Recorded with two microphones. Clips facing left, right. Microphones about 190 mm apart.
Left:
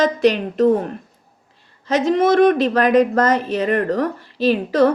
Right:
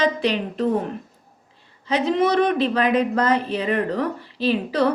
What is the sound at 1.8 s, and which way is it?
Speech, 45° left (ahead or behind).